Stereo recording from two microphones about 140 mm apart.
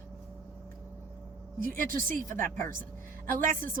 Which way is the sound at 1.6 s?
85° right.